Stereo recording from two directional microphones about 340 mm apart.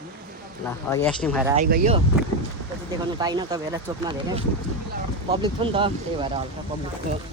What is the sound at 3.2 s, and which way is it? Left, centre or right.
Speech, centre.